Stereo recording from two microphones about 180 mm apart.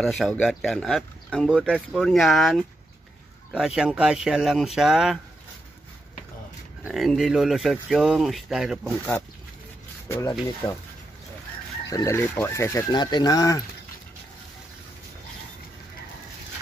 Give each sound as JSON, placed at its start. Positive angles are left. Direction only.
{"t": 0.0, "sound": "speech", "side_deg": 0}
{"t": 6.8, "sound": "speech", "side_deg": 0}
{"t": 11.9, "sound": "speech", "side_deg": 15}